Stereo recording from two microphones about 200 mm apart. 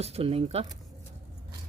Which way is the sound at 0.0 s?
30° right (ahead or behind).